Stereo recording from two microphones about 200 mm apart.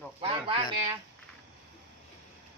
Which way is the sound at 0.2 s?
25° right (ahead or behind).